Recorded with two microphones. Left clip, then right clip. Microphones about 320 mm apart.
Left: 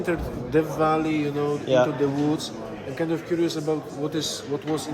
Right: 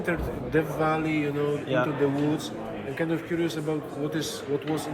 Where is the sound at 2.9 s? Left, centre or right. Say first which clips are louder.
Left 3 dB; left.